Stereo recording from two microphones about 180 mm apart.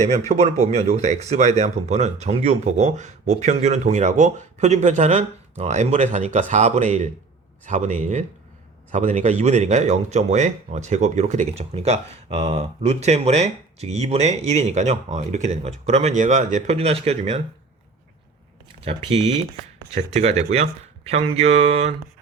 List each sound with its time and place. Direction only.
0.3 s a man's voice: 40° right (ahead or behind)
19.9 s speech: 35° right (ahead or behind)